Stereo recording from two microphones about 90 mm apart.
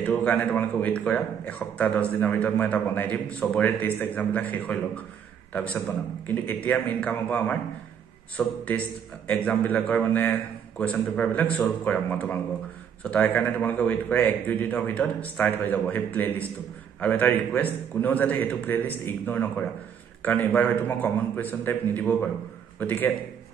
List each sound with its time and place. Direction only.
0.0 s a man's voice: 15° left (ahead or behind)